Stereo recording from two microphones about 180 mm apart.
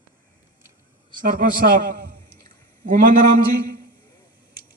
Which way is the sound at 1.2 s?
50° right (ahead or behind).